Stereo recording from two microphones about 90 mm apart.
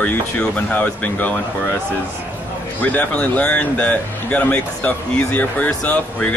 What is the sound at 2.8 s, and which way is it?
Speech, 15° left (ahead or behind).